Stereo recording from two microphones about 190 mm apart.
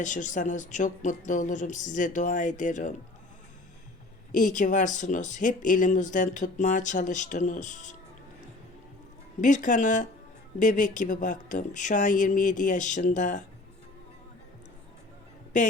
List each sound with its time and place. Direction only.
0.0 s speech: 40° left (ahead or behind)
4.3 s speech: 40° left (ahead or behind)
9.4 s speech: 40° left (ahead or behind)